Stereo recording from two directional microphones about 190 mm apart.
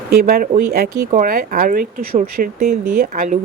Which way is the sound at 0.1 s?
50° right (ahead or behind).